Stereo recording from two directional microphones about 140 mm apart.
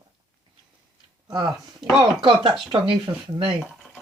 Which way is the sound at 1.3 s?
30° right (ahead or behind).